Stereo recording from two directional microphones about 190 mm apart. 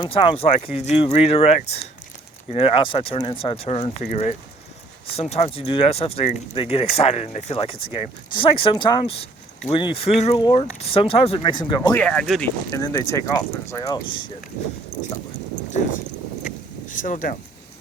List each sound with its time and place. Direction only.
0.0 s speech: 25° left (ahead or behind)
11.9 s speech: 5° left (ahead or behind)
12.7 s speech: 20° left (ahead or behind)
16.9 s speech: 45° left (ahead or behind)